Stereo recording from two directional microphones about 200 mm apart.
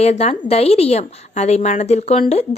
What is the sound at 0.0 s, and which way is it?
A woman's voice, 30° left (ahead or behind).